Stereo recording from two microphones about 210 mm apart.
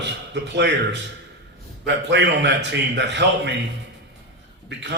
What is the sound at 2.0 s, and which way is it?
A man's voice, 55° right (ahead or behind).